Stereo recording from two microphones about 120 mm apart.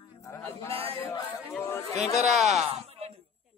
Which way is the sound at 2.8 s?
55° right (ahead or behind).